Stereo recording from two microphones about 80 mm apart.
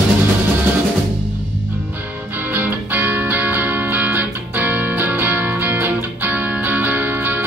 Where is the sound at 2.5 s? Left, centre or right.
Right.